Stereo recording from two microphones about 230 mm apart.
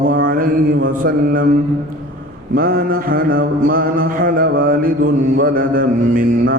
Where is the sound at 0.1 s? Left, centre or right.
Right.